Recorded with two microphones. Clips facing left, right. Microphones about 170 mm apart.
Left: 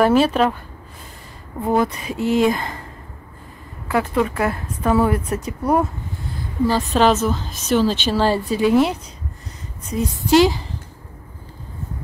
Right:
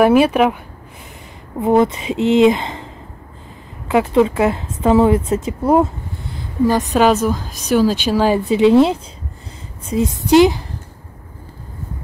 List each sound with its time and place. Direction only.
0.0 s a woman's voice: 10° right (ahead or behind)
1.6 s a woman's voice: 20° right (ahead or behind)
3.9 s a woman's voice: 20° right (ahead or behind)
8.5 s a woman's voice: 25° right (ahead or behind)